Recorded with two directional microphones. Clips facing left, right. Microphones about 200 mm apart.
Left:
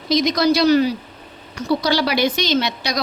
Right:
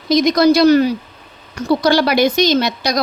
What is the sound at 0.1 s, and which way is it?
A woman's voice, 50° right (ahead or behind).